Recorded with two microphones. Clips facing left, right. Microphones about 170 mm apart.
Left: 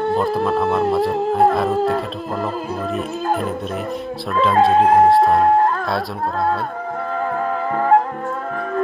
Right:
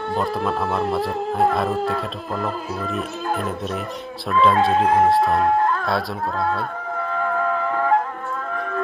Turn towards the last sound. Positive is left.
turn(degrees=40)  # may be behind; listen again after turning